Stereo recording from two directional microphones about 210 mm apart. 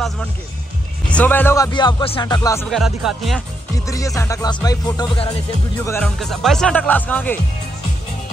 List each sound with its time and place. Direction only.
1.1 s music: 10° left (ahead or behind)
2.7 s speech: centre (ahead or behind)
3.7 s music: 15° left (ahead or behind)
5.9 s speech: 5° left (ahead or behind)